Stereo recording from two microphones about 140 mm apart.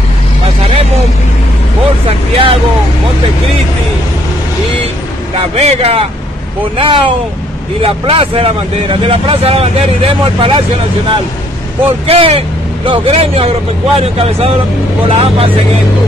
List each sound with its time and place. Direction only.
2.0 s vehicle: 40° right (ahead or behind)
5.4 s speech: 45° right (ahead or behind)
12.1 s speech: 45° right (ahead or behind)